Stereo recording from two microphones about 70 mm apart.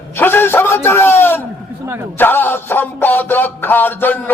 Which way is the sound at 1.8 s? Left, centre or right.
Right.